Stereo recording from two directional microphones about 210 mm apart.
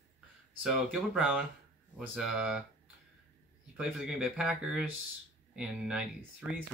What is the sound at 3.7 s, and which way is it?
Speech, 5° right (ahead or behind).